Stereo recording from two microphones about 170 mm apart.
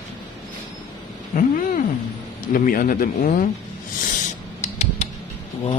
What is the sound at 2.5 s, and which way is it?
Speech, 55° left (ahead or behind).